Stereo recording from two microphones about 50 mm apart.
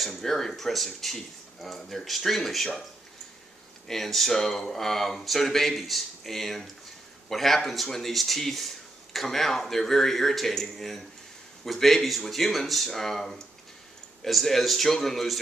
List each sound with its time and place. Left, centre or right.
0.0 s speech: centre
3.8 s speech: centre